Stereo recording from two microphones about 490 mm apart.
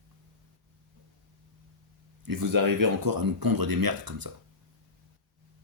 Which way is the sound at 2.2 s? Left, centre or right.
Right.